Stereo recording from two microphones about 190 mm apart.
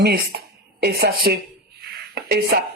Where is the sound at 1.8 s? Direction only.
55° right (ahead or behind).